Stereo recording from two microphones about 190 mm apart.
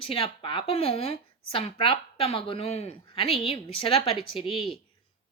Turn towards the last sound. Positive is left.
turn(degrees=30)  # may be behind; listen again after turning